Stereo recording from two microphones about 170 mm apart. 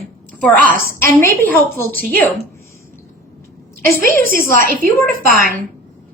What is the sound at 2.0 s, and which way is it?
Speech, 60° right (ahead or behind).